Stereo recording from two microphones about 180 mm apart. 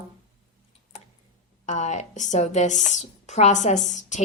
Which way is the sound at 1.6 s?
40° left (ahead or behind).